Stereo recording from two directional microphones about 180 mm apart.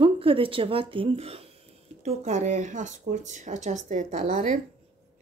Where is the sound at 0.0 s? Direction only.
30° right (ahead or behind).